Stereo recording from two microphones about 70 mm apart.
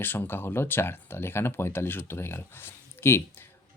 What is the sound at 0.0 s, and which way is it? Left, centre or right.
Speech, left.